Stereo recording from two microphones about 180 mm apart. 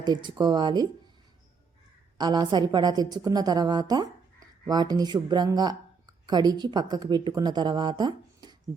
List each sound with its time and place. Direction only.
0.0 s a woman's voice: 25° right (ahead or behind)
2.1 s a woman's voice: 25° right (ahead or behind)